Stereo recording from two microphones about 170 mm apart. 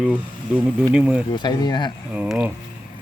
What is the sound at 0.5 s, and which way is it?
Speech, 5° right (ahead or behind).